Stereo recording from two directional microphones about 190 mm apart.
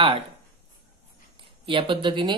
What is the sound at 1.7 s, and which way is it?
Speech, 25° right (ahead or behind).